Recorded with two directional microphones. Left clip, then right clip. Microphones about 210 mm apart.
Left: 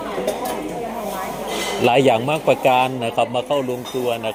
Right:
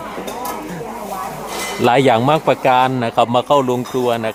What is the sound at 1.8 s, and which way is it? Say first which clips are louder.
A man's voice: right 3 dB; 20° right (ahead or behind).